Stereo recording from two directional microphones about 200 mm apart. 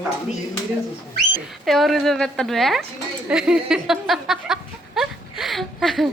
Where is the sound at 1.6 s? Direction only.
Centre (ahead or behind).